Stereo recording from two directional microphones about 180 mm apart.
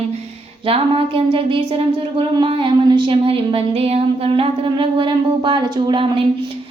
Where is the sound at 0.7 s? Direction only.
30° right (ahead or behind).